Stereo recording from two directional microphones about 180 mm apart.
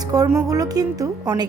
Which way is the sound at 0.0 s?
20° right (ahead or behind).